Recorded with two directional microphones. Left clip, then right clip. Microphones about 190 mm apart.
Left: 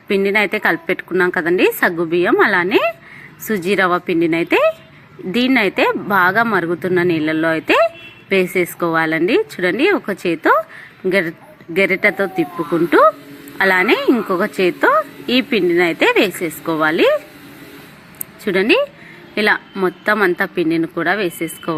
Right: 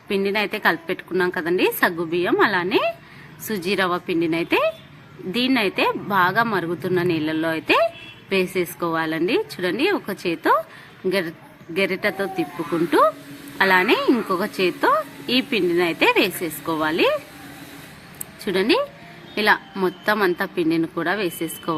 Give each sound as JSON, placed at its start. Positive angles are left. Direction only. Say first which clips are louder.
{"t": 0.1, "sound": "a woman's voice", "louder": "left 7 dB", "side_deg": 20}
{"t": 18.4, "sound": "a woman's voice", "louder": "left 5 dB", "side_deg": 15}